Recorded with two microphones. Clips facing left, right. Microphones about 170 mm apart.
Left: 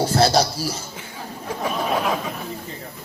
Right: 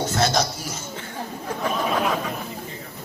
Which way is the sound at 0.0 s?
35° left (ahead or behind).